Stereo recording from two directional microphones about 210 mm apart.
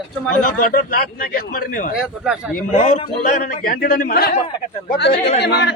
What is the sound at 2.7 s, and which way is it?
A man's voice, 35° left (ahead or behind).